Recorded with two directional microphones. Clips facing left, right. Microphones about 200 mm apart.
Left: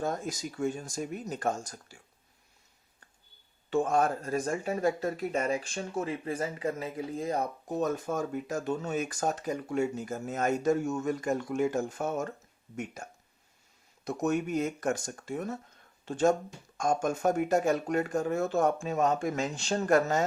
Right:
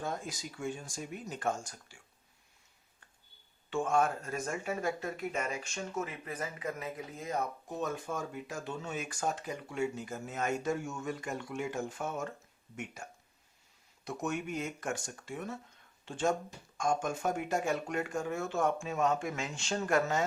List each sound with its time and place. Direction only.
0.0 s speech: 45° left (ahead or behind)
3.7 s speech: 35° left (ahead or behind)